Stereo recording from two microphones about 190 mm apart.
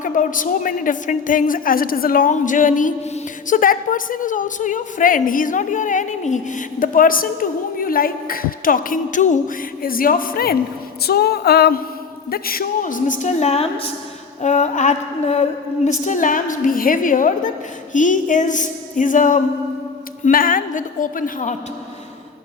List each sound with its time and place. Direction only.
0.0 s a woman's voice: 45° left (ahead or behind)
11.0 s music: 55° left (ahead or behind)
12.3 s a woman's voice: 50° left (ahead or behind)